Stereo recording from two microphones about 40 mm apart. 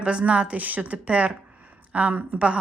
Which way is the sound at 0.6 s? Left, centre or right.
Right.